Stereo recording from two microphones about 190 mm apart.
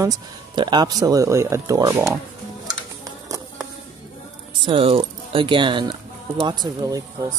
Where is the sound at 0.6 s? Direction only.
25° right (ahead or behind).